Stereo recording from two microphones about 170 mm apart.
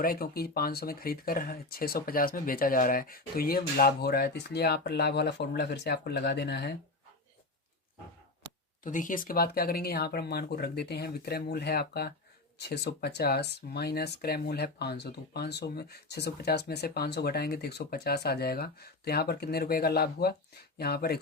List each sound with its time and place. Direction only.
0.0 s speech: 60° left (ahead or behind)
8.8 s speech: 50° left (ahead or behind)